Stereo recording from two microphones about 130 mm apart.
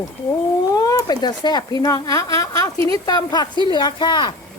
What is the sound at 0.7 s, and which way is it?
Speech, 25° left (ahead or behind).